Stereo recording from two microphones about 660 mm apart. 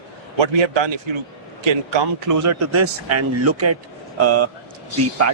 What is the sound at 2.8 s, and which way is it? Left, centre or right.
Speech, right.